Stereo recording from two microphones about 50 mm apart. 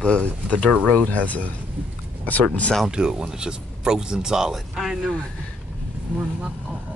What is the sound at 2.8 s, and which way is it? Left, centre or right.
Speech, centre.